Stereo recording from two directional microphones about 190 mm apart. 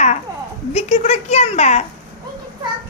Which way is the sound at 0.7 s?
35° left (ahead or behind).